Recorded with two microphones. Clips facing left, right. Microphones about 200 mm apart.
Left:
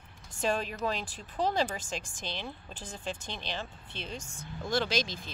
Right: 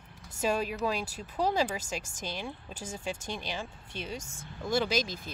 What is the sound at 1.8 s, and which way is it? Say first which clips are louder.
Speech: right 1 dB; 40° right (ahead or behind).